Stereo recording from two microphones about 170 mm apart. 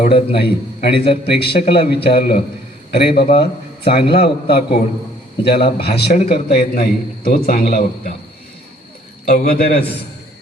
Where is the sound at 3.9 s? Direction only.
35° left (ahead or behind).